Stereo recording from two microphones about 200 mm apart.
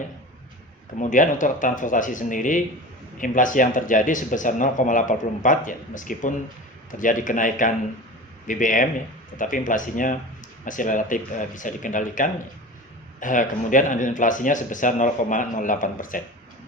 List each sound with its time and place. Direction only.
0.9 s speech: 40° left (ahead or behind)